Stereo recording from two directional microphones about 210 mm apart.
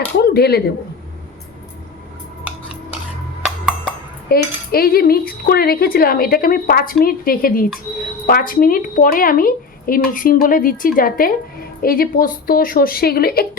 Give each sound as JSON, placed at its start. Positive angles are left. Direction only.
{"t": 0.2, "sound": "speech", "side_deg": 50}
{"t": 3.4, "sound": "a sound", "side_deg": 0}
{"t": 4.3, "sound": "speech", "side_deg": 45}